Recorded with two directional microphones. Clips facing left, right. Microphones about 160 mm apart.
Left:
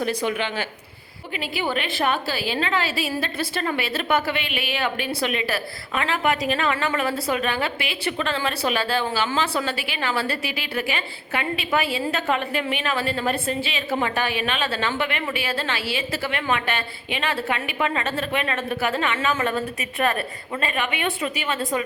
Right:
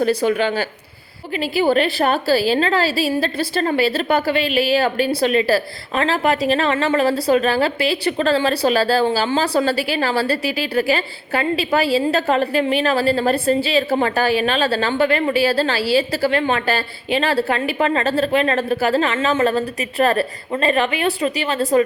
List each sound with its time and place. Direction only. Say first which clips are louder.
0.0 s a woman's voice: right 7 dB; 35° right (ahead or behind)